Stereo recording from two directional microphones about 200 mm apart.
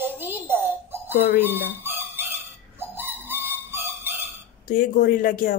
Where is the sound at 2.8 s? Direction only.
10° right (ahead or behind).